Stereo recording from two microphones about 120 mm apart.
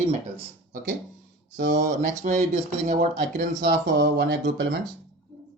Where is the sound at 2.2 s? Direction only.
90° right.